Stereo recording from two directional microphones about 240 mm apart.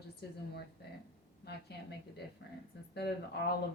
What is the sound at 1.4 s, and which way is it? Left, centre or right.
Speech, left.